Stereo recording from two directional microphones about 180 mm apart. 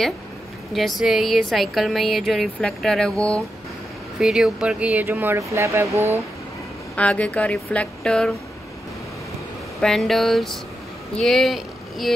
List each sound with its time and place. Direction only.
0.7 s speech: centre (ahead or behind); by 5.9 s 15° right (ahead or behind)
7.0 s a woman's voice: 5° left (ahead or behind)
9.8 s speech: centre (ahead or behind)